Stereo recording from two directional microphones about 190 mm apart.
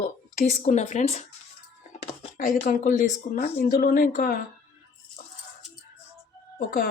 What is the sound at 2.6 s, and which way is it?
A woman's voice, 45° left (ahead or behind).